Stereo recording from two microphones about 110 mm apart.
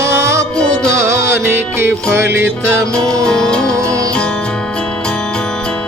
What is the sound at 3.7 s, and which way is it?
Music, 30° right (ahead or behind).